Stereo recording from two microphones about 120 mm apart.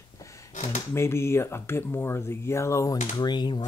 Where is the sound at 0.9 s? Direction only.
20° left (ahead or behind).